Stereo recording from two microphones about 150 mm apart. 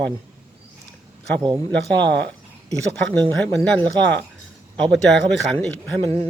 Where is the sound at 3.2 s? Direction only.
10° left (ahead or behind).